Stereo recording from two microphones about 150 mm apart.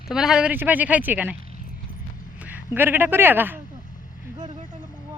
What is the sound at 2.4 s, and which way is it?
Speech, 10° right (ahead or behind).